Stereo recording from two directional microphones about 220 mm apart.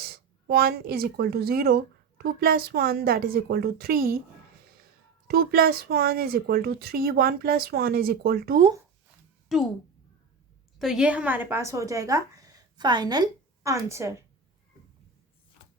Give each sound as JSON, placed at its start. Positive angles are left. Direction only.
{"t": 0.0, "sound": "speech", "side_deg": -45}
{"t": 5.3, "sound": "speech", "side_deg": -45}
{"t": 9.5, "sound": "speech", "side_deg": 0}
{"t": 10.8, "sound": "a woman's voice", "side_deg": 0}